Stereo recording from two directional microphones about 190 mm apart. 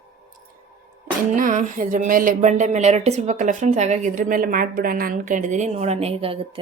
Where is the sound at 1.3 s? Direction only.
45° right (ahead or behind).